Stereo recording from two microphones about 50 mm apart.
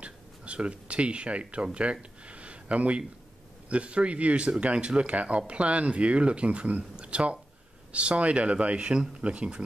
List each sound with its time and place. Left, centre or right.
0.0 s speech: right